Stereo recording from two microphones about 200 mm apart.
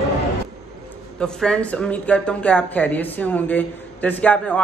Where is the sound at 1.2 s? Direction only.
5° left (ahead or behind).